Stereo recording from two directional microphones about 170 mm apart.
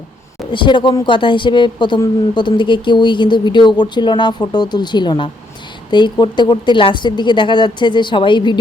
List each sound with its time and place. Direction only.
0.5 s speech: 30° left (ahead or behind)